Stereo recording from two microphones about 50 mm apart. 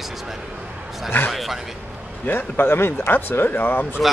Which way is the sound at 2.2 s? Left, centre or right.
Left.